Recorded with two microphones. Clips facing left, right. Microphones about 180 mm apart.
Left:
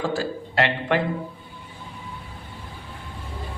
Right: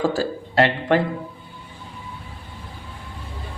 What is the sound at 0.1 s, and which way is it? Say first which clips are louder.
Speech: right 2 dB; 35° right (ahead or behind).